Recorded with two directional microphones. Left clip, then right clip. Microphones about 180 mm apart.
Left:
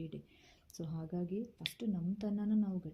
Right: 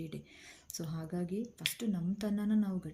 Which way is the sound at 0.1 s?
20° right (ahead or behind).